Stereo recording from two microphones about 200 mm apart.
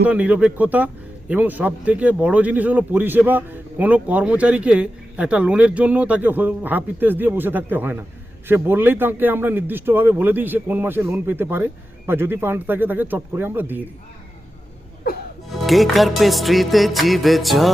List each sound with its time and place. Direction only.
0.0 s a man's voice: 5° right (ahead or behind)
15.4 s music: centre (ahead or behind)